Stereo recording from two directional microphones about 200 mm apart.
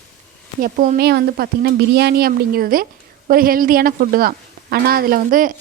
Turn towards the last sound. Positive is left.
turn(degrees=-45)  # may be behind; listen again after turning